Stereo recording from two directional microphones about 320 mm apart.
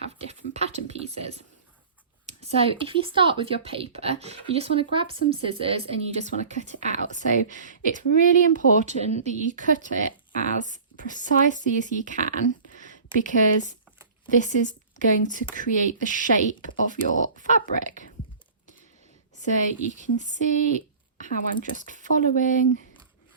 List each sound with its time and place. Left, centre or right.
0.3 s speech: centre
6.9 s speech: left
9.7 s speech: right
10.0 s speech: left
19.4 s speech: left